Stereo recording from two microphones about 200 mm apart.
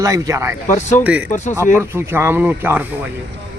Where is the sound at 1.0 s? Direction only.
5° right (ahead or behind).